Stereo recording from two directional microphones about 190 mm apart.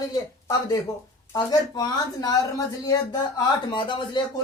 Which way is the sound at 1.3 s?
20° left (ahead or behind).